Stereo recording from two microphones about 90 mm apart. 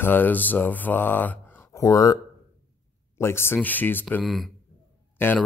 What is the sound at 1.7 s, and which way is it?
Speech, 40° left (ahead or behind).